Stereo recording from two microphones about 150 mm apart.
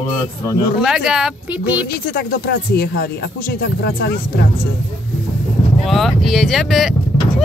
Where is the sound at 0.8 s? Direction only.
5° right (ahead or behind).